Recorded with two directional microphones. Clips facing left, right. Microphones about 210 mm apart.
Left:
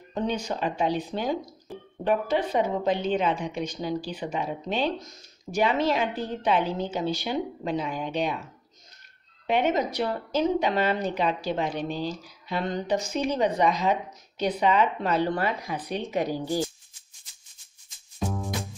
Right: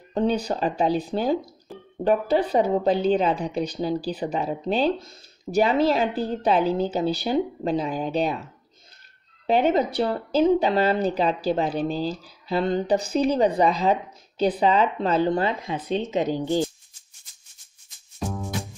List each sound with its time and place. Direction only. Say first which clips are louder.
0.1 s a woman's voice: right 5 dB; 35° right (ahead or behind)
1.7 s a sound: left 1 dB; centre (ahead or behind)
2.0 s a woman's voice: right 4 dB; 35° right (ahead or behind)
9.5 s a woman's voice: right 4 dB; 35° right (ahead or behind)
18.2 s music: even; centre (ahead or behind)